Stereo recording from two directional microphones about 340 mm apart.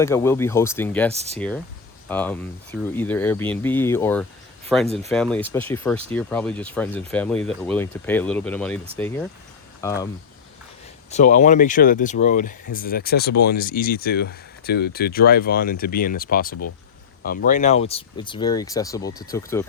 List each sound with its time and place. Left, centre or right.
0.0 s speech: centre
1.1 s speech: centre
2.0 s speech: centre
11.1 s speech: left